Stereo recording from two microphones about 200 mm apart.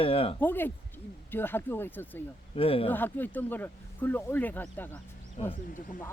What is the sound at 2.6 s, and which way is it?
Speech, 30° left (ahead or behind).